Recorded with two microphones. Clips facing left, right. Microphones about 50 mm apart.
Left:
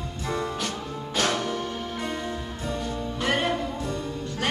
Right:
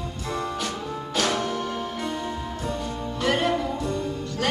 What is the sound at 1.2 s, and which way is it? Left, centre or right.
Music, right.